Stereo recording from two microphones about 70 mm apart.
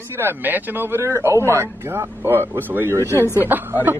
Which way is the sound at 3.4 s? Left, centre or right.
Right.